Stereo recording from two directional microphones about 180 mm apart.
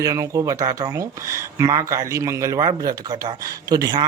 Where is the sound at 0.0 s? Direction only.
20° right (ahead or behind).